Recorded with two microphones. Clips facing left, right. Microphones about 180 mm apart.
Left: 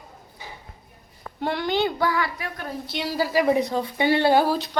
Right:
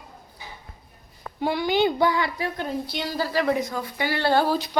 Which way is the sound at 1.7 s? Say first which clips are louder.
Right 3 dB; 20° right (ahead or behind).